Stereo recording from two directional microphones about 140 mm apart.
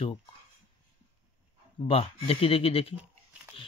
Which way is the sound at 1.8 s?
45° left (ahead or behind).